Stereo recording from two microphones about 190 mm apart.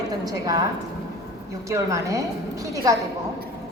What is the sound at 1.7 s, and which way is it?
A woman's voice, 15° right (ahead or behind).